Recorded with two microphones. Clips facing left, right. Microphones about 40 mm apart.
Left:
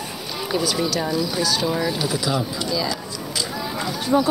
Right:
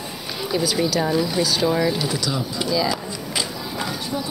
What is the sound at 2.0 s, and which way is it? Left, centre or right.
Speech, centre.